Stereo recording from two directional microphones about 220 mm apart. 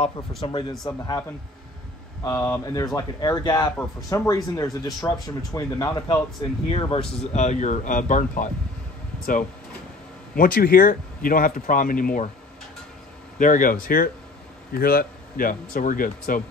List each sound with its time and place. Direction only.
0.4 s speech: 20° left (ahead or behind)
2.2 s speech: 10° left (ahead or behind)
6.7 s speech: 25° left (ahead or behind)
13.4 s speech: 40° left (ahead or behind)